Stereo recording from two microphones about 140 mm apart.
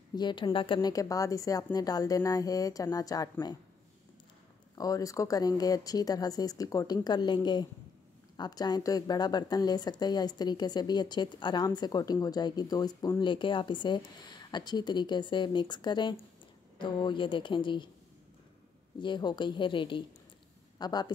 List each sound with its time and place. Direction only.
0.1 s a woman's voice: 30° left (ahead or behind)
0.7 s speech: 25° left (ahead or behind)
4.7 s a woman's voice: 25° left (ahead or behind)
18.9 s a woman's voice: 35° left (ahead or behind)